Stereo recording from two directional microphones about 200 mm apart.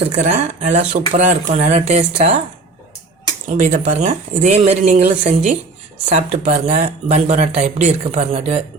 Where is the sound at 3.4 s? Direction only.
40° right (ahead or behind).